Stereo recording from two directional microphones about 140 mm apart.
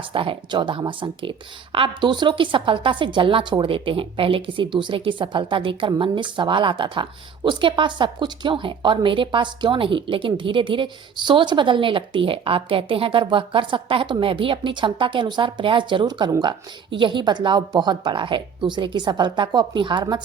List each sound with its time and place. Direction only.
0.1 s speech: 40° right (ahead or behind)